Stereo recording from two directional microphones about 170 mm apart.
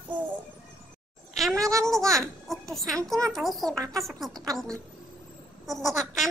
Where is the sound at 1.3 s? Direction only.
Centre (ahead or behind).